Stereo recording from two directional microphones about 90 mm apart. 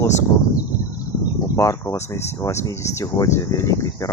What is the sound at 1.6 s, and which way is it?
Speech, 35° left (ahead or behind).